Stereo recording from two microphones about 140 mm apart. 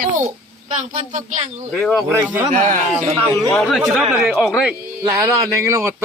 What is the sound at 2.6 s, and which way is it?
Speech, 50° right (ahead or behind).